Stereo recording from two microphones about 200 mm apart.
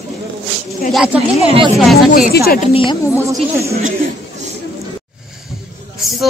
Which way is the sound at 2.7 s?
25° left (ahead or behind).